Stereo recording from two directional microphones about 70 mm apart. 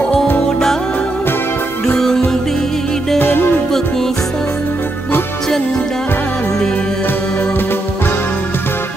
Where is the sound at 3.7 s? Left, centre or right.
Centre.